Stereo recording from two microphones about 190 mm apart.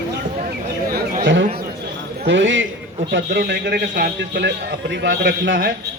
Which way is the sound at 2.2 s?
70° right (ahead or behind).